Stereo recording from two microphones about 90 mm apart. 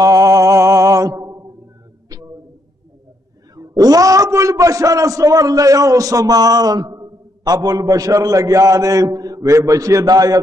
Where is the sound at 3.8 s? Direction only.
40° right (ahead or behind).